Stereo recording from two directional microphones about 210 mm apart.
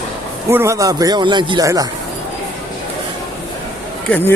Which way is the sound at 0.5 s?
15° right (ahead or behind).